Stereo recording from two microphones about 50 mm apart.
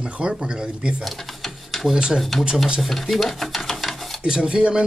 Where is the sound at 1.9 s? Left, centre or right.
Centre.